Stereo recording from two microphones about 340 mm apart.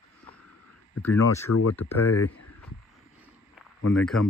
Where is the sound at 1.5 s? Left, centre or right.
Left.